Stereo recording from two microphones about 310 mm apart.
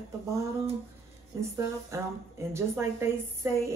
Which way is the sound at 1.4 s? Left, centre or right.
Centre.